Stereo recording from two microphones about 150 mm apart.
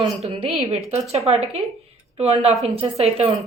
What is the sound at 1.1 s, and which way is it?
A woman's voice, 45° right (ahead or behind).